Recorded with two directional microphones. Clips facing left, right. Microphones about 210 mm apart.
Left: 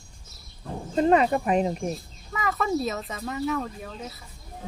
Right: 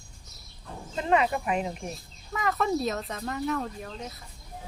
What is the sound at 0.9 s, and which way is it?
Speech, 40° left (ahead or behind).